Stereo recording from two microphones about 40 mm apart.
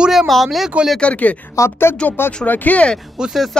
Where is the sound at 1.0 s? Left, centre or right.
Left.